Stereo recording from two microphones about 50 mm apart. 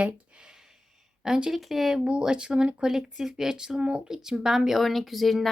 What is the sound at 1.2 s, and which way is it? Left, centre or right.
Speech, centre.